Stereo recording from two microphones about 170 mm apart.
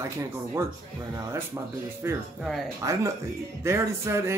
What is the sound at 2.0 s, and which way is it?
Speech, 15° right (ahead or behind).